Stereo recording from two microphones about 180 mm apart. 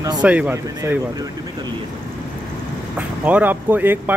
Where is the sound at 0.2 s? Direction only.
5° right (ahead or behind).